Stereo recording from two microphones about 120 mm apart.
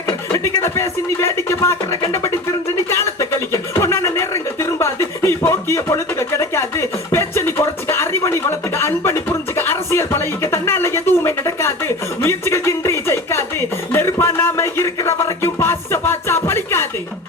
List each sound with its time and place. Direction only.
0.3 s speech: 20° left (ahead or behind)
2.9 s speech: 25° left (ahead or behind)
4.8 s a sound: 20° left (ahead or behind)
13.9 s speech: 20° left (ahead or behind)